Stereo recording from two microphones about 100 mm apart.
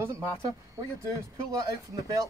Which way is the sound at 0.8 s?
30° right (ahead or behind).